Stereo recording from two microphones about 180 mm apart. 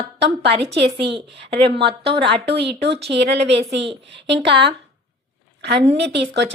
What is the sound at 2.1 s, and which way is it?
Speech, 30° right (ahead or behind).